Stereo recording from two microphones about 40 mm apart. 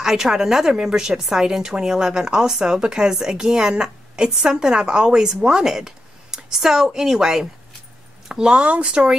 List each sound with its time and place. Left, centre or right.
0.0 s a woman's voice: centre
8.5 s speech: right